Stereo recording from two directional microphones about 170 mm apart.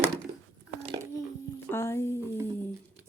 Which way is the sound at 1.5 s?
15° left (ahead or behind).